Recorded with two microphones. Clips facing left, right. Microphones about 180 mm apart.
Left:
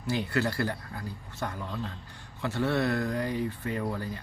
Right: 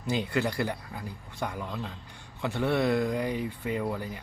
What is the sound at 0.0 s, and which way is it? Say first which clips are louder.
A man's voice: even; 20° right (ahead or behind).